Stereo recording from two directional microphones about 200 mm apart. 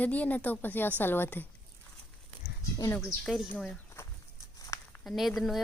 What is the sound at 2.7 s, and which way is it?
Speech, 15° left (ahead or behind).